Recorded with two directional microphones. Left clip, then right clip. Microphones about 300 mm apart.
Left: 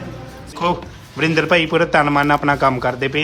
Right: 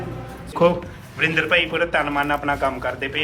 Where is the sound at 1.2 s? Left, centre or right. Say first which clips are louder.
Left 3 dB; centre.